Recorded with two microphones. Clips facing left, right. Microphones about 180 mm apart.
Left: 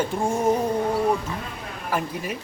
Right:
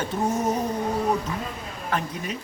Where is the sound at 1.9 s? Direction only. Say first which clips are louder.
Left 1 dB; 10° left (ahead or behind).